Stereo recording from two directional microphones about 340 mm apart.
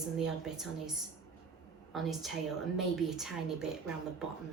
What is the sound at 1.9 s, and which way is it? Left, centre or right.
A woman's voice, centre.